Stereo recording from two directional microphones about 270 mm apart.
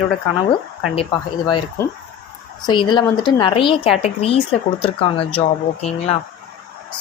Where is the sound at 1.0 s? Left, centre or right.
Centre.